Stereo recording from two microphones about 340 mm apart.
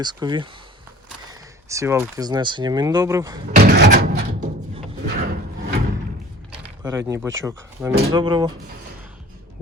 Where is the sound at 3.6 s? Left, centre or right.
Right.